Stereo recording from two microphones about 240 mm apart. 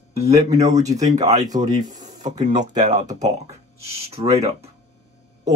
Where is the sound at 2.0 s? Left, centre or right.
Right.